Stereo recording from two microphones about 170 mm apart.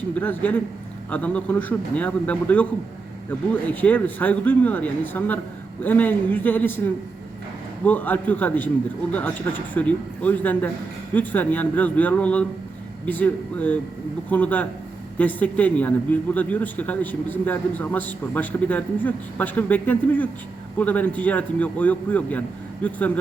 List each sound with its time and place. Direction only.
0.2 s a man's voice: 10° left (ahead or behind)